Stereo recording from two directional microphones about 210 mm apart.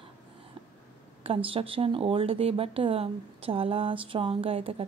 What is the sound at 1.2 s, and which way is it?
Speech, 25° right (ahead or behind).